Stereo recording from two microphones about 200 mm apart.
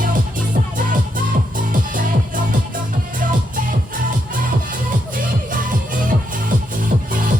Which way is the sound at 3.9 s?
45° right (ahead or behind).